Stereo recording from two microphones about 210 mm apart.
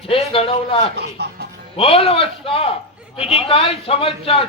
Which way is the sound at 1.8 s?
25° left (ahead or behind).